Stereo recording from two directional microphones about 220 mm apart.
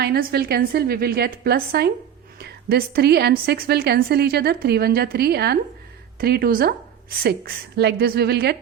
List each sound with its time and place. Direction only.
0.0 s a woman's voice: 45° right (ahead or behind)